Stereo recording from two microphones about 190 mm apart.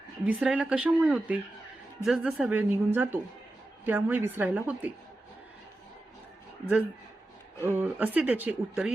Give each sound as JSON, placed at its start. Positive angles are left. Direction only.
{"t": 0.3, "sound": "speech", "side_deg": -5}
{"t": 7.6, "sound": "speech", "side_deg": -10}